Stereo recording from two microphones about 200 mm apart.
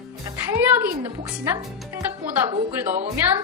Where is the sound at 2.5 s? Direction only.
30° right (ahead or behind).